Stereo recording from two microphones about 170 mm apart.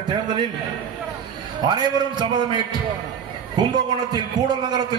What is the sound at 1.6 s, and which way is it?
A man's voice, 25° right (ahead or behind).